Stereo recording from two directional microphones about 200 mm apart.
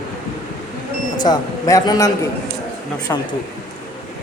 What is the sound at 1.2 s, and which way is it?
Speech, 20° left (ahead or behind).